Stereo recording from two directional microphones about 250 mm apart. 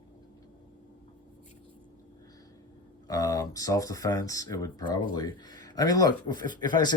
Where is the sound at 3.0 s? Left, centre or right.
Centre.